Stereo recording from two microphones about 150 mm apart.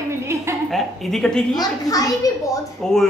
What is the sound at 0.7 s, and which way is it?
Speech, centre (ahead or behind).